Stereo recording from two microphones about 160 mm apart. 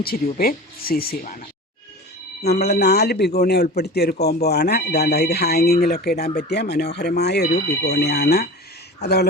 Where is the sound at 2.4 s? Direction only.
90° left.